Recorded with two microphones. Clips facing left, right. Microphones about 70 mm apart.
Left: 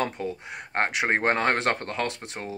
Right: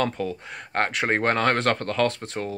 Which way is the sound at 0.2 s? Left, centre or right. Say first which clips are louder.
Right 2 dB; left.